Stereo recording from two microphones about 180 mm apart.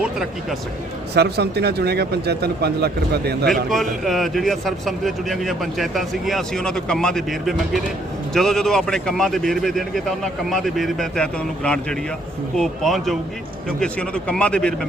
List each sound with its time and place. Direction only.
1.1 s speech: 65° right (ahead or behind)
3.4 s speech: centre (ahead or behind)